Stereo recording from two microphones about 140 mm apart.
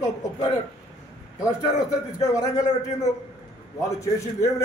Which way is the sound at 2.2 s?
25° left (ahead or behind).